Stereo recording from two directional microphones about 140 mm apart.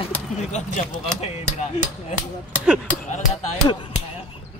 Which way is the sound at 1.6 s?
55° left (ahead or behind).